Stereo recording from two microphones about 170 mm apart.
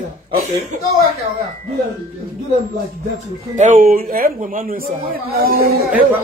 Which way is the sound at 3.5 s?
50° right (ahead or behind).